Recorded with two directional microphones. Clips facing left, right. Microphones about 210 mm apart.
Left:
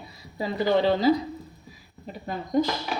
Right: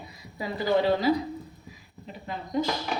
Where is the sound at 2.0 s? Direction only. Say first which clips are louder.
Left 4 dB; 45° left (ahead or behind).